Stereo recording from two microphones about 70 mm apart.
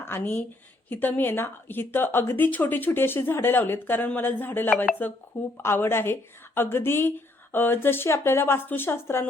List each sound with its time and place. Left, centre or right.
0.0 s a woman's voice: left